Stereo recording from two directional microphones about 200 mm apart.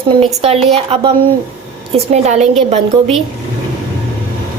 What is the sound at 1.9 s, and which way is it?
A woman's voice, 30° right (ahead or behind).